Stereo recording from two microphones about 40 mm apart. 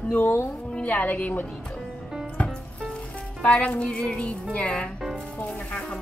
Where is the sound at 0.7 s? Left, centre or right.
Left.